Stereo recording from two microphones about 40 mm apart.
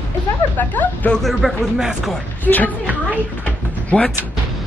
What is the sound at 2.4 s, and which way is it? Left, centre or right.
Speech, left.